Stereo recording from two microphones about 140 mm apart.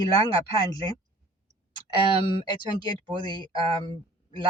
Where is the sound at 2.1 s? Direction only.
30° left (ahead or behind).